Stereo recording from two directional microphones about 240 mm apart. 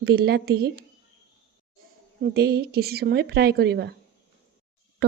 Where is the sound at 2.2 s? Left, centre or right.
Right.